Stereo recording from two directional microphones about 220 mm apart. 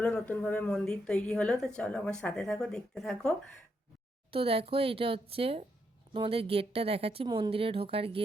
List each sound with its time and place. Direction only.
0.0 s speech: 5° left (ahead or behind)
4.3 s a woman's voice: 25° right (ahead or behind)